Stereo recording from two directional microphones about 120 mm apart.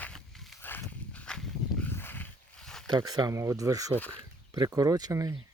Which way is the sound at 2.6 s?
5° left (ahead or behind).